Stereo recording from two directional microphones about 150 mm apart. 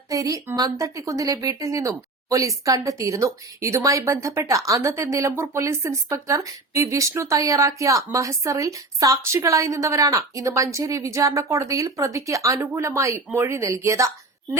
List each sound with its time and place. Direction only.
0.1 s speech: 20° right (ahead or behind)